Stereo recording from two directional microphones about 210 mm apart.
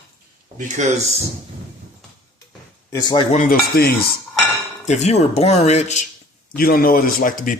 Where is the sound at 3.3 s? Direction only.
40° left (ahead or behind).